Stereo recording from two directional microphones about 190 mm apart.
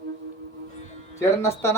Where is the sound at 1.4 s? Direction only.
15° left (ahead or behind).